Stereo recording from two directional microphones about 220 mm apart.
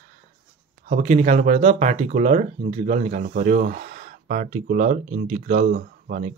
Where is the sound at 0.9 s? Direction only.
30° right (ahead or behind).